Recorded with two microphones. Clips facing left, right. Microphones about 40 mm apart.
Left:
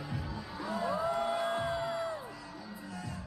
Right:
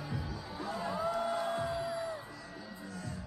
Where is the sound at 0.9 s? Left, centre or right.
Left.